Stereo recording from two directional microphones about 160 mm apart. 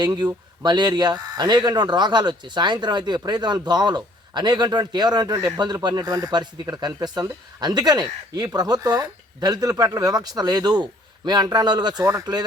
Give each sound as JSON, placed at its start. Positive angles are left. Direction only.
{"t": 0.0, "sound": "a man's voice", "side_deg": -25}